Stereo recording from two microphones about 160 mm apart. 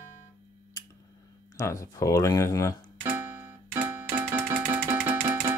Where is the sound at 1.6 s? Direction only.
20° left (ahead or behind).